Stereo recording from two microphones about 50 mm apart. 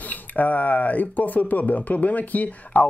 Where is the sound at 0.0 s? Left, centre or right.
Left.